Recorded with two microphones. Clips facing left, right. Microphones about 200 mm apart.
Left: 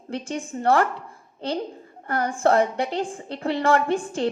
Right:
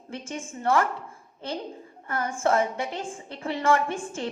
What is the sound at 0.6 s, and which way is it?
Speech, 35° left (ahead or behind).